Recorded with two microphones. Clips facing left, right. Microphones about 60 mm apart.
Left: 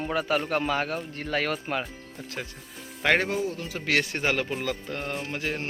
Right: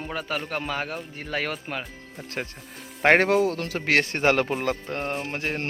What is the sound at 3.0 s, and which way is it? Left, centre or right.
Speech, right.